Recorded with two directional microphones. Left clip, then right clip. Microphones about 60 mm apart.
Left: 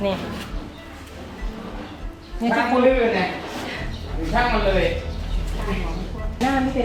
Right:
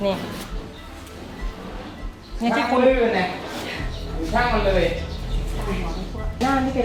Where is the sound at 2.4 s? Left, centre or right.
Right.